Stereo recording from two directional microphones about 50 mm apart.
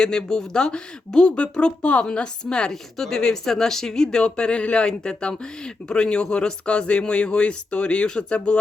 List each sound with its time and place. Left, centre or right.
0.0 s speech: centre